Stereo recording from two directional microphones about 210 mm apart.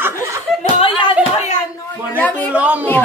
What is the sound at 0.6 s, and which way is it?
Clapping, 25° left (ahead or behind).